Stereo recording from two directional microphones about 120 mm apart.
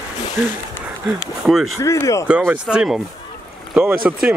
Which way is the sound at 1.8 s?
25° left (ahead or behind).